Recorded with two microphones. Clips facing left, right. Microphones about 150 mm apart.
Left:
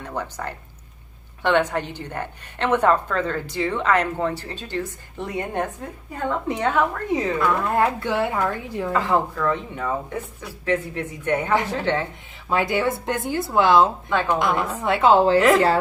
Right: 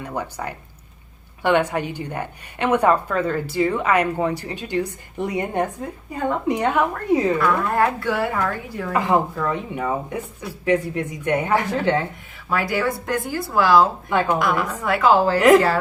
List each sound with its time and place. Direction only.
0.0 s a woman's voice: 10° right (ahead or behind)
7.3 s speech: 20° left (ahead or behind)
8.9 s a woman's voice: 15° right (ahead or behind)
12.5 s speech: 20° left (ahead or behind)